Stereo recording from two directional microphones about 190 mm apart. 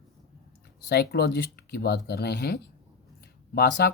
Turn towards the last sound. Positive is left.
turn(degrees=55)  # may be behind; listen again after turning